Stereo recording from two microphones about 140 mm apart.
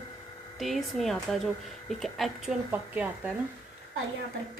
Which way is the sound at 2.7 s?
10° right (ahead or behind).